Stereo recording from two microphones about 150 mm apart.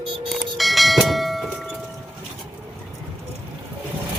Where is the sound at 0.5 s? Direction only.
Centre (ahead or behind).